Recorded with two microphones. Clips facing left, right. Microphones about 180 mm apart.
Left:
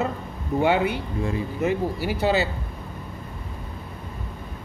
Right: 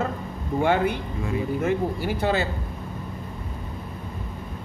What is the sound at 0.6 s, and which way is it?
Speech, 5° left (ahead or behind).